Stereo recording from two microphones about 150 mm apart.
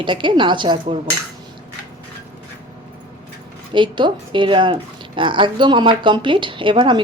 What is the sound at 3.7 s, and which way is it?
A woman's voice, 30° right (ahead or behind).